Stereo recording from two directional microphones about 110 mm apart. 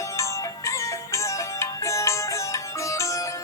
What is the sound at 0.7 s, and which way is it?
Music, 25° left (ahead or behind).